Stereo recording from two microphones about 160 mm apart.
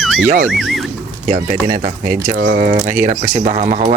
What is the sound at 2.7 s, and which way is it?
Speech, 50° right (ahead or behind).